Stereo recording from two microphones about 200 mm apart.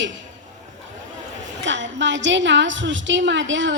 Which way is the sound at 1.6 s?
65° right (ahead or behind).